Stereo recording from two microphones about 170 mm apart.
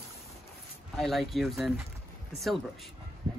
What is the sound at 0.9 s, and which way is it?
Speech, centre (ahead or behind).